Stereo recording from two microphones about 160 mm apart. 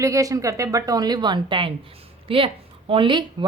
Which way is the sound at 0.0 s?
20° right (ahead or behind).